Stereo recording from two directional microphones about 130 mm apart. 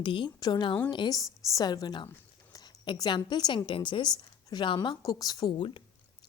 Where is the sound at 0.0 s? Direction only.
40° left (ahead or behind).